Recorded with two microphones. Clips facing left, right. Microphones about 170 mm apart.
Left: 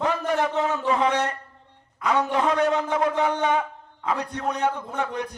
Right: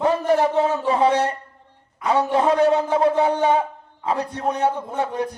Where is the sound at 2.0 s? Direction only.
30° right (ahead or behind).